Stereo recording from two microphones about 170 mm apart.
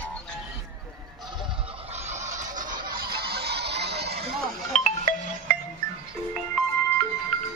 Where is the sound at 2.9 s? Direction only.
65° right (ahead or behind).